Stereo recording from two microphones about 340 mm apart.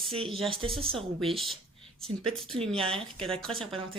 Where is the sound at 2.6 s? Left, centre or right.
Centre.